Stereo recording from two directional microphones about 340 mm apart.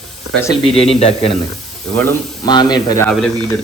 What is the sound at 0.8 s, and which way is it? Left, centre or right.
Speech, centre.